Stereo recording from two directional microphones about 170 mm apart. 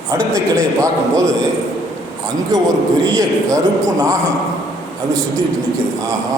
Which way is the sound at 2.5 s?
20° right (ahead or behind).